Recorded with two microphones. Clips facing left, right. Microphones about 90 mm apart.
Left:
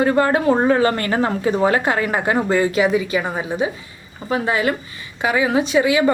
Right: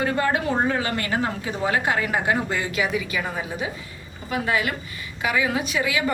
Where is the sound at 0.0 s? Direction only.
35° left (ahead or behind).